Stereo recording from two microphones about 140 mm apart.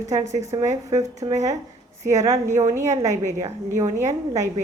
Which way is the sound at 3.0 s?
60° right (ahead or behind).